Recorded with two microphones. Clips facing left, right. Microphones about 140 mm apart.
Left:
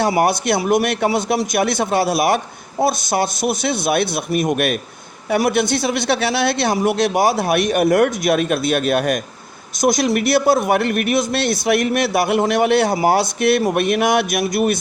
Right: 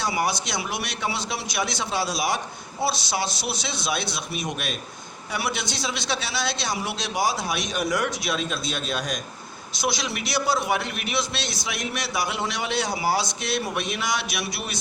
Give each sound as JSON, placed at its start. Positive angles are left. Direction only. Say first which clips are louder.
{"t": 0.2, "sound": "speech", "louder": "left 10 dB", "side_deg": 55}
{"t": 9.7, "sound": "a man's voice", "louder": "left 11 dB", "side_deg": 45}